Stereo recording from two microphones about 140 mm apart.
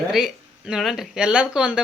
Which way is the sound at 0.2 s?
5° right (ahead or behind).